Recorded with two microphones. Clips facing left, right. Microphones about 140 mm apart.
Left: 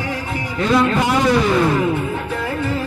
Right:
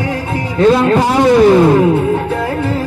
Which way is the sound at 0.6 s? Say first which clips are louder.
Right 7 dB; 35° right (ahead or behind).